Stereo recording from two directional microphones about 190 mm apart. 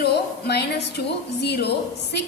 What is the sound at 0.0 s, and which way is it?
A woman's voice, 60° left (ahead or behind).